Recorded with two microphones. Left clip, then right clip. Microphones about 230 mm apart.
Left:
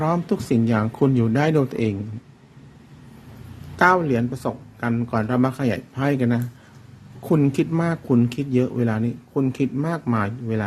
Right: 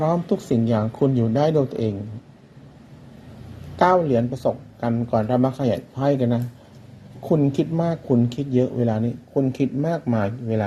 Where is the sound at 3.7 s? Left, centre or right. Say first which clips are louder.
Even; centre.